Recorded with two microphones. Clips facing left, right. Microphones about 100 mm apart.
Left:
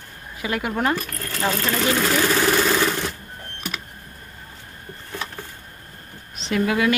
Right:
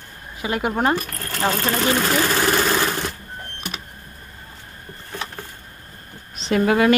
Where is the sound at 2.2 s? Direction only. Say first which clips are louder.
Even; centre (ahead or behind).